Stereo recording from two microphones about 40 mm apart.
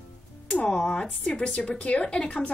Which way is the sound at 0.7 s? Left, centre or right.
Centre.